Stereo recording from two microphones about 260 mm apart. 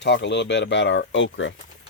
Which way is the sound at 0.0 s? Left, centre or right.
Left.